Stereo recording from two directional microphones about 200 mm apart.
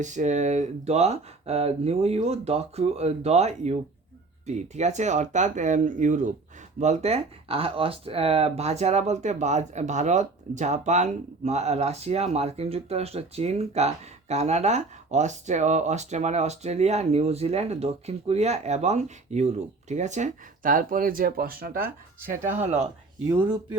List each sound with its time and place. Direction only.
0.0 s speech: 35° right (ahead or behind)